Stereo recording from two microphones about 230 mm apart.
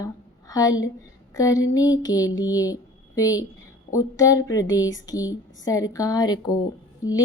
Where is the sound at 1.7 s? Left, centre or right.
Centre.